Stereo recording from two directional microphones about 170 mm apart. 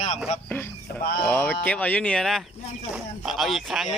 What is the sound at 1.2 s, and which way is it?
Speech, 10° left (ahead or behind).